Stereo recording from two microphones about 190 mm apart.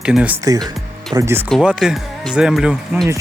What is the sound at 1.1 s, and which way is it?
Speech, 15° right (ahead or behind).